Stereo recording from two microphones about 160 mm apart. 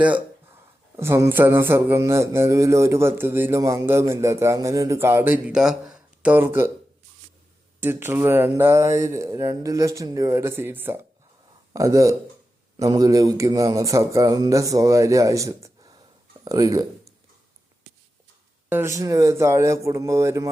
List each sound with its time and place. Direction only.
0.9 s mantra: 15° right (ahead or behind)
7.8 s mantra: 15° right (ahead or behind)
11.7 s speech: 20° right (ahead or behind)
18.7 s speech: 15° right (ahead or behind)